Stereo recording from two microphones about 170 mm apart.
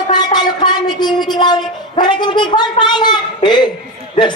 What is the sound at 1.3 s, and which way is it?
A man's voice, 25° left (ahead or behind).